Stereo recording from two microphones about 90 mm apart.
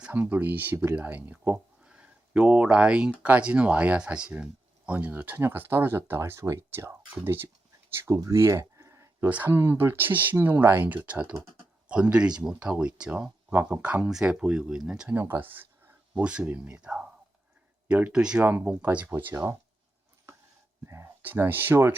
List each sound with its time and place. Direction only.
0.0 s speech: 20° right (ahead or behind); by 9.0 s 35° right (ahead or behind)
9.2 s speech: 20° right (ahead or behind)
15.1 s speech: 25° right (ahead or behind)
18.1 s speech: 10° right (ahead or behind); by 19.5 s 25° right (ahead or behind)
20.8 s speech: 30° right (ahead or behind)